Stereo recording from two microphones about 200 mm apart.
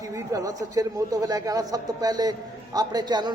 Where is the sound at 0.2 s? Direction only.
15° right (ahead or behind).